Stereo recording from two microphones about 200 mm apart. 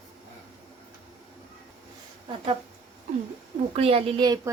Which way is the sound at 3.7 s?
30° right (ahead or behind).